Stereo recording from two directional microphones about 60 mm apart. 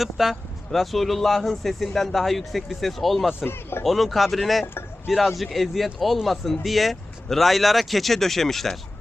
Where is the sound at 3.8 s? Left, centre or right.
Centre.